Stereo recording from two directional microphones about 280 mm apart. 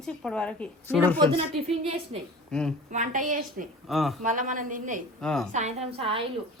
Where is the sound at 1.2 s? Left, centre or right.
Centre.